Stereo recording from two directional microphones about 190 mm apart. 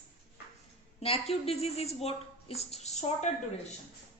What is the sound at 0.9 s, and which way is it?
A woman's voice, 30° left (ahead or behind).